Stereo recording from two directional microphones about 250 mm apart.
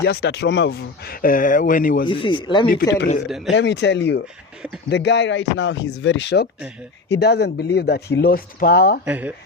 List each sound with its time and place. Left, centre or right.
0.0 s speech: left
2.0 s speech: centre
3.2 s a man's voice: centre
3.5 s speech: left
9.0 s speech: centre